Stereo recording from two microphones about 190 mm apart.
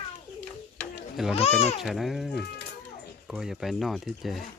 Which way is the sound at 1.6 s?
35° left (ahead or behind).